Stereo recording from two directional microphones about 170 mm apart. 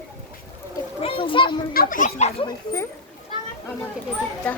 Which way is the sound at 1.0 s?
30° left (ahead or behind).